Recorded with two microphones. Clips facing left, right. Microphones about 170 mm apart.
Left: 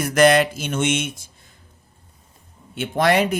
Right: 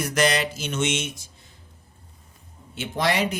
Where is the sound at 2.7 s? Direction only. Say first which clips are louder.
Left 6 dB; 55° left (ahead or behind).